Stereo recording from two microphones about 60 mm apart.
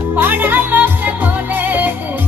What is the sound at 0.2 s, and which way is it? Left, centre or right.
Music, right.